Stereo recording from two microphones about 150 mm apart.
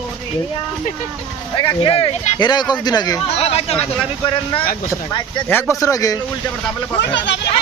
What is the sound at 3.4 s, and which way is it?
Speech, 45° left (ahead or behind).